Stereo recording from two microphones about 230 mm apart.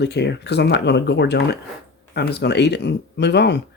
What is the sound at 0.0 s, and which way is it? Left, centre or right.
Speech, left.